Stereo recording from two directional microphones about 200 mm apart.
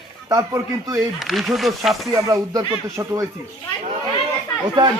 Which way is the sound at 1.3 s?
Centre (ahead or behind).